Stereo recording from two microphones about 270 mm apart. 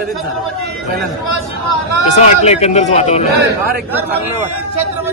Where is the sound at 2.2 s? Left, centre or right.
Left.